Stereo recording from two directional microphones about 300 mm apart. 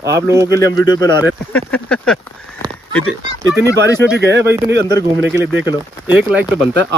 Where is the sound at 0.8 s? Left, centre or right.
Centre.